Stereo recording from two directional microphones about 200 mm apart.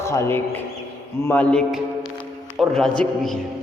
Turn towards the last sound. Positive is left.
turn(degrees=5)  # may be behind; listen again after turning